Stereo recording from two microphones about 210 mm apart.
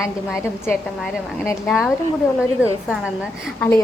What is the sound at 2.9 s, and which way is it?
Speech, 5° right (ahead or behind).